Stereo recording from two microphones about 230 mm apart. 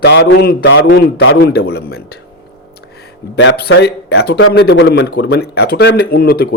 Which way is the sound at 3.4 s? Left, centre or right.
Left.